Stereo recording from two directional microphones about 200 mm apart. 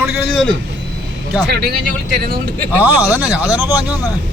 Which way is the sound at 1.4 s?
50° right (ahead or behind).